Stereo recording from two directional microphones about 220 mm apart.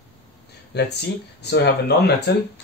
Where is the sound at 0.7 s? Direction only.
50° left (ahead or behind).